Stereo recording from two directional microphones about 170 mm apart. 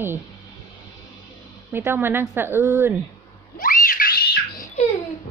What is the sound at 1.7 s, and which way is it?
A woman's voice, 10° right (ahead or behind).